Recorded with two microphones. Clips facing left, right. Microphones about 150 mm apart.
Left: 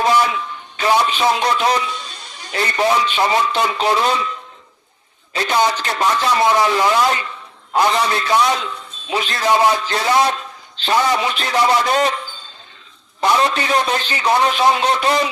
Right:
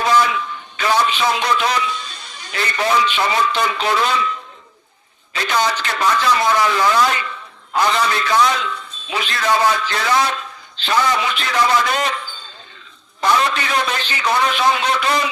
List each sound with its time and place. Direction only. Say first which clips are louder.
0.2 s a sound: even; 35° left (ahead or behind)
1.0 s a man's voice: left 2 dB; 35° left (ahead or behind)
5.3 s a man's voice: left 2 dB; 35° left (ahead or behind)
9.5 s a man's voice: left 2 dB; 20° left (ahead or behind)
13.2 s a man's voice: left 1 dB; 30° left (ahead or behind)